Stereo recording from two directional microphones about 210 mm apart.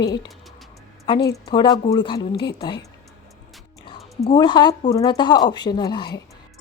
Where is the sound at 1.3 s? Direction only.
20° left (ahead or behind).